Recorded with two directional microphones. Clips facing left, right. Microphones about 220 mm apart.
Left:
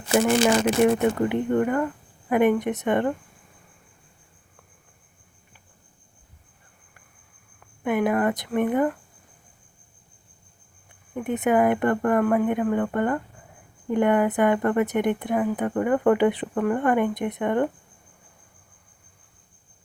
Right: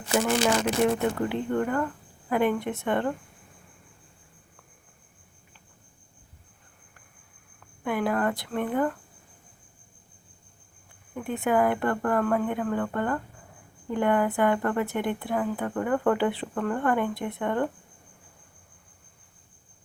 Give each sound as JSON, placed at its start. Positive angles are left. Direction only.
{"t": 0.1, "sound": "a woman's voice", "side_deg": 15}
{"t": 7.9, "sound": "a woman's voice", "side_deg": 20}
{"t": 11.1, "sound": "a woman's voice", "side_deg": 20}